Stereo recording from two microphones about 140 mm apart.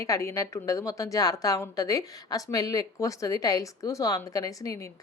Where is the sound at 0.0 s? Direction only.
20° left (ahead or behind).